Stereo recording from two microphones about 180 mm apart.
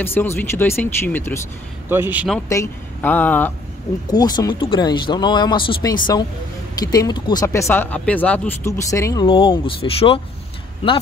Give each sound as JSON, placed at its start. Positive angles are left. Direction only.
{"t": 0.0, "sound": "speech", "side_deg": 10}
{"t": 1.9, "sound": "speech", "side_deg": -10}
{"t": 2.5, "sound": "speech", "side_deg": 15}
{"t": 4.1, "sound": "speech", "side_deg": 20}
{"t": 9.2, "sound": "speech", "side_deg": 30}